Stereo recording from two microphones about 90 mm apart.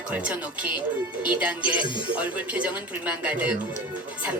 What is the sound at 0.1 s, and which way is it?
Speech, 15° right (ahead or behind).